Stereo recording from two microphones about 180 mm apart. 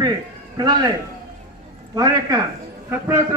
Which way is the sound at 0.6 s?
20° right (ahead or behind).